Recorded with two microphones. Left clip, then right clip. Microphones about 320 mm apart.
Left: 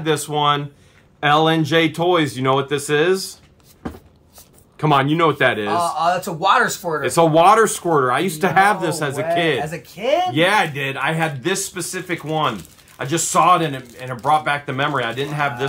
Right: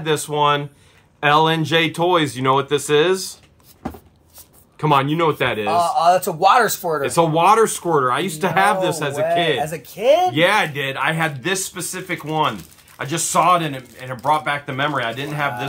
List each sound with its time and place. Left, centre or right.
0.0 s speech: centre
4.7 s speech: centre
5.7 s speech: right
7.0 s speech: centre
9.6 s speech: right
10.3 s speech: centre